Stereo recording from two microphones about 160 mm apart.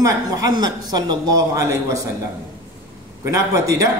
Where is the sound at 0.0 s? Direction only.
20° right (ahead or behind).